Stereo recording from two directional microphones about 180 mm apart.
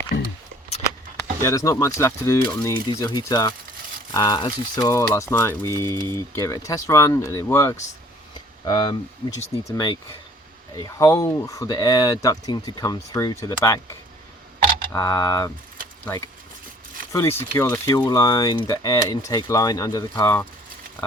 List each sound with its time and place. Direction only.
1.1 s speech: 15° left (ahead or behind)
14.9 s speech: 15° left (ahead or behind)
17.1 s speech: 15° left (ahead or behind)